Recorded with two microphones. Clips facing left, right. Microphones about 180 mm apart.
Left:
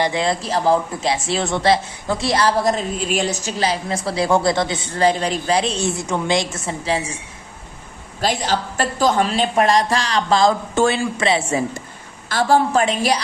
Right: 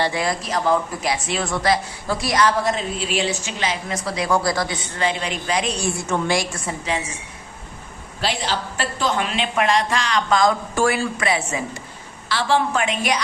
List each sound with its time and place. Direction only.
0.0 s speech: 25° left (ahead or behind)
8.2 s speech: 45° left (ahead or behind); by 11.6 s 30° left (ahead or behind)
12.3 s speech: 45° left (ahead or behind)